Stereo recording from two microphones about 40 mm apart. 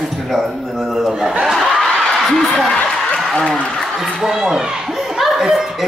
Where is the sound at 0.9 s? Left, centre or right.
Centre.